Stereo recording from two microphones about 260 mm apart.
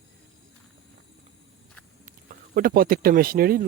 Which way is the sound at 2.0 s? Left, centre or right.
Right.